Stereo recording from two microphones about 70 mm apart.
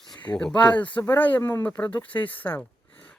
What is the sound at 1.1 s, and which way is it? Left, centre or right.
Speech, left.